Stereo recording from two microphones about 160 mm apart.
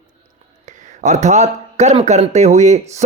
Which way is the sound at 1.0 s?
50° right (ahead or behind).